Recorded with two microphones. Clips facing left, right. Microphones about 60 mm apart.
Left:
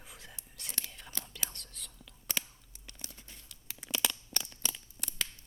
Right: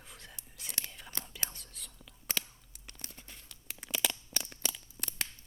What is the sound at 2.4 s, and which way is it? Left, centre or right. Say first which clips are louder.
Scissors: left 1 dB; centre.